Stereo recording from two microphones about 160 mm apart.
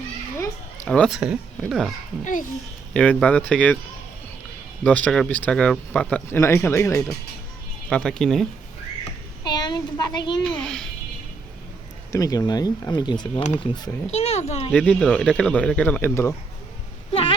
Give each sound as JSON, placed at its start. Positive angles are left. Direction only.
{"t": 0.9, "sound": "speech", "side_deg": 5}
{"t": 2.2, "sound": "a child's voice", "side_deg": 55}
{"t": 2.9, "sound": "speech", "side_deg": 5}
{"t": 4.8, "sound": "speech", "side_deg": 10}
{"t": 7.9, "sound": "speech", "side_deg": 5}
{"t": 9.4, "sound": "a child's voice", "side_deg": 25}
{"t": 10.4, "sound": "speech", "side_deg": 5}
{"t": 12.1, "sound": "speech", "side_deg": 20}
{"t": 14.1, "sound": "a child's voice", "side_deg": 40}
{"t": 14.7, "sound": "speech", "side_deg": 5}
{"t": 17.1, "sound": "a sound", "side_deg": 35}